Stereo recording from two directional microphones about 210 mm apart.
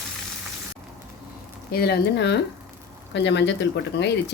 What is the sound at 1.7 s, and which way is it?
Speech, 50° left (ahead or behind).